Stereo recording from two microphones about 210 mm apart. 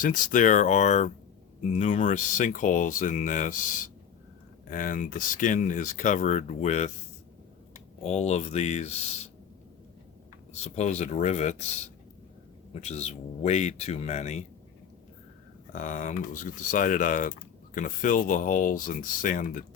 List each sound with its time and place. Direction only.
0.0 s speech: 40° left (ahead or behind)
8.0 s speech: 30° left (ahead or behind)
10.5 s speech: 30° left (ahead or behind)
12.7 s speech: 30° left (ahead or behind)
15.7 s speech: 40° left (ahead or behind)